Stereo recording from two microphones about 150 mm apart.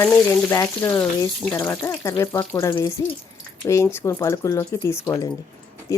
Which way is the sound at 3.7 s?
20° left (ahead or behind).